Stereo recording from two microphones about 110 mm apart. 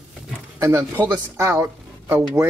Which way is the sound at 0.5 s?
25° right (ahead or behind).